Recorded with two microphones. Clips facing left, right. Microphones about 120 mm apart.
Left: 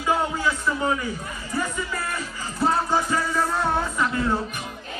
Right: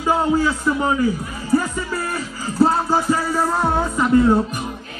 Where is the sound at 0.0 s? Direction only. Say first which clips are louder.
Right 6 dB; 30° right (ahead or behind).